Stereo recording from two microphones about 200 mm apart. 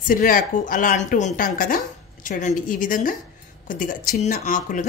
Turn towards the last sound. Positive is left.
turn(degrees=40)  # may be behind; listen again after turning